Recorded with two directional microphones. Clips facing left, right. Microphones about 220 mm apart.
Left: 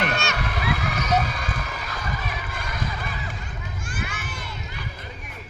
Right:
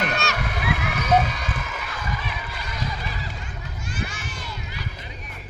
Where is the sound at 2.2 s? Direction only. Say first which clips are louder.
Left 1 dB; 50° left (ahead or behind).